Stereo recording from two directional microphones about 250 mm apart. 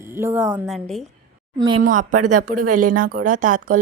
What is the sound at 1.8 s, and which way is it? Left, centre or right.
Speech, right.